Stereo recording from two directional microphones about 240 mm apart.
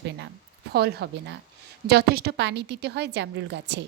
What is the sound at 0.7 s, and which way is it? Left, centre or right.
A woman's voice, right.